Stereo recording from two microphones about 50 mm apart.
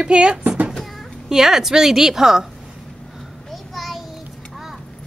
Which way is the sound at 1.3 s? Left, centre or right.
Centre.